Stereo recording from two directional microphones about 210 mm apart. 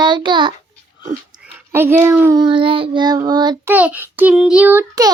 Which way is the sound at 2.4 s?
25° right (ahead or behind).